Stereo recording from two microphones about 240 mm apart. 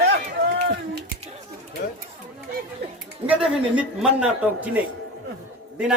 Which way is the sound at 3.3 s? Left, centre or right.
Centre.